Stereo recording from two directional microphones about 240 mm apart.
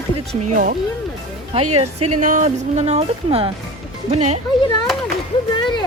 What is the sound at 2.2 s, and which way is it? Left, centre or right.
Speech, right.